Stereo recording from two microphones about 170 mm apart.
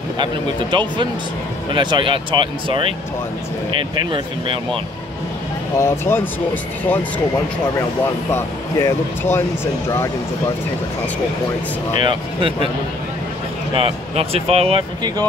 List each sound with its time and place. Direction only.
0.2 s speech: 25° right (ahead or behind)
4.0 s speech: 30° right (ahead or behind)
5.8 s speech: 15° left (ahead or behind)
8.3 s speech: 15° left (ahead or behind)
12.0 s speech: 30° right (ahead or behind)
13.7 s speech: 35° right (ahead or behind)